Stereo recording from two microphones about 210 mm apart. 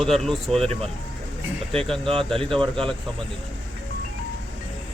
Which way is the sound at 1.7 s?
5° left (ahead or behind).